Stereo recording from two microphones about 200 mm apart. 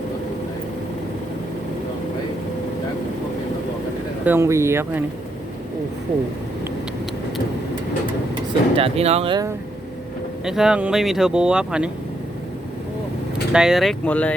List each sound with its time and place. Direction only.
4.3 s speech: 15° right (ahead or behind)
8.7 s speech: 30° right (ahead or behind)
10.4 s speech: 5° right (ahead or behind)
13.5 s speech: 5° right (ahead or behind)